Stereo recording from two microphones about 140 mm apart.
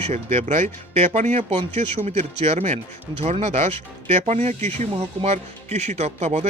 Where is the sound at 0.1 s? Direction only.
50° right (ahead or behind).